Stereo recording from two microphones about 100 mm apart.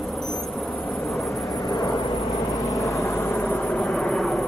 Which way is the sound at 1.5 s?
45° left (ahead or behind).